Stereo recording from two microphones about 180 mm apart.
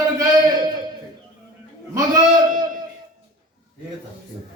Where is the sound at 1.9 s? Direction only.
20° right (ahead or behind).